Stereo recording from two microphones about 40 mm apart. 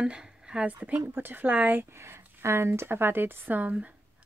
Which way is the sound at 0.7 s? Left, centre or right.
Right.